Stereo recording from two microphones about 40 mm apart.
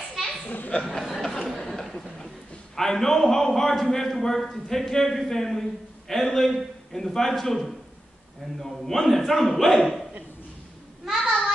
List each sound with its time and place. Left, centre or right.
0.5 s speech: left
0.7 s a man's voice: centre
8.8 s a man's voice: centre
11.1 s a sound: centre